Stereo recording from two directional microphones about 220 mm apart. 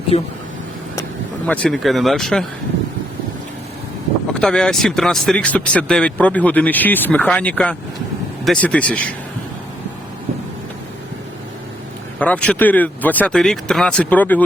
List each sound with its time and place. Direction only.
0.1 s speech: 30° left (ahead or behind)
1.5 s speech: 5° left (ahead or behind)
4.4 s speech: 5° left (ahead or behind)
12.2 s speech: 5° left (ahead or behind)